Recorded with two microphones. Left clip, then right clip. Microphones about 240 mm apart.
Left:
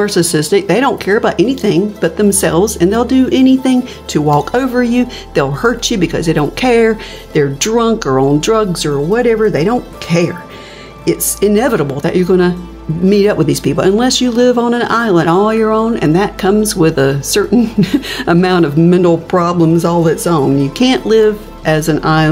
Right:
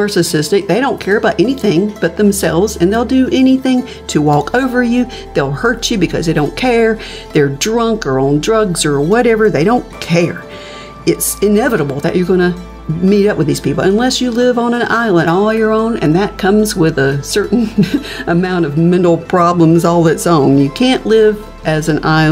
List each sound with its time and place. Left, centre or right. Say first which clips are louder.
0.0 s speech: left 1 dB; centre
8.7 s speech: right 2 dB; centre